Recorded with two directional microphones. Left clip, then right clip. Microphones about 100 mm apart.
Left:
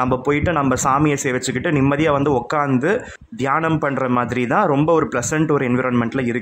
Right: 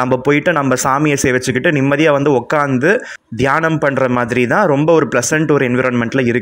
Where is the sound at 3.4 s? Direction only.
30° right (ahead or behind).